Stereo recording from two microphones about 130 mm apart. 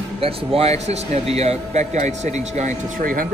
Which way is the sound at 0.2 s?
50° right (ahead or behind).